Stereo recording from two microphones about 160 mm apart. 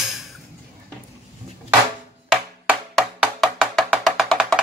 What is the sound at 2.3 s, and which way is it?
Music, 5° right (ahead or behind).